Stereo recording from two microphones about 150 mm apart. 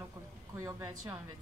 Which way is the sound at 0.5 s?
20° right (ahead or behind).